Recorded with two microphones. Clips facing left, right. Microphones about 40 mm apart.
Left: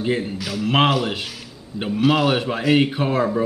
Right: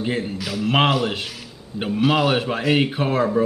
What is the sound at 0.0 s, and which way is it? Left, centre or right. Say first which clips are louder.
Music: left 2 dB; centre.